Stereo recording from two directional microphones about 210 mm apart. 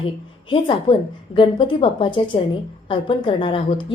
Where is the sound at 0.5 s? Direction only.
25° left (ahead or behind).